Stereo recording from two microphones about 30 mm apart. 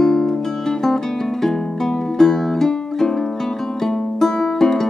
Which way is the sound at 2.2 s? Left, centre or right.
Centre.